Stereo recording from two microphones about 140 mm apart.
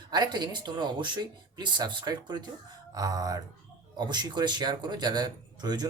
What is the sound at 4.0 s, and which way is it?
Speech, 30° right (ahead or behind).